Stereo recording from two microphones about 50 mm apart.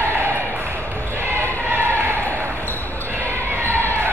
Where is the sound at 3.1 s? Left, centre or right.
Right.